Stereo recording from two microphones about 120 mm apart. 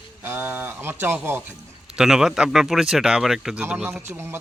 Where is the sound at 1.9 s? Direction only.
5° right (ahead or behind).